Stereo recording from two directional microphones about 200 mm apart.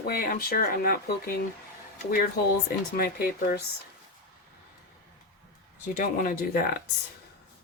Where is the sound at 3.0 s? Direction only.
50° left (ahead or behind).